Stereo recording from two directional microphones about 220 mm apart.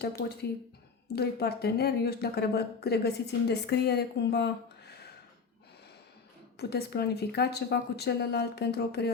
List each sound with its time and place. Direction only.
0.0 s speech: 45° left (ahead or behind)
6.6 s speech: 45° left (ahead or behind)